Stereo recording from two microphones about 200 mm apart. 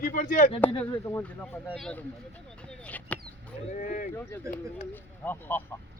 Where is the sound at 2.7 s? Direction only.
5° left (ahead or behind).